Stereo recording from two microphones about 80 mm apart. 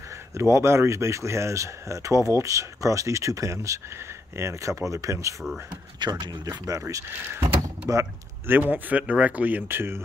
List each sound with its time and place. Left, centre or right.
0.3 s speech: right
5.9 s speech: right
6.8 s speech: right
8.5 s speech: right